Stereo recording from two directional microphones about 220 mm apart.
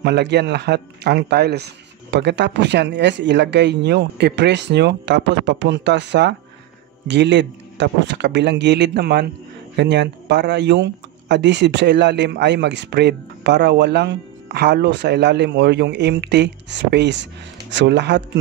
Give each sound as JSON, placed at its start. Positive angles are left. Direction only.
{"t": 0.0, "sound": "speech", "side_deg": -50}